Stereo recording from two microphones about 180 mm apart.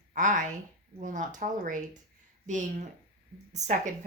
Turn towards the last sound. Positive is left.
turn(degrees=-40)  # may be behind; listen again after turning